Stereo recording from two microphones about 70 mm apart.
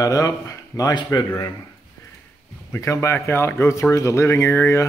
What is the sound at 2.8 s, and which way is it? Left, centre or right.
Speech, left.